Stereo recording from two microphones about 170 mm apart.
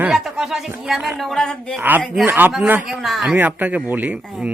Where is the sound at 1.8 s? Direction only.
10° right (ahead or behind).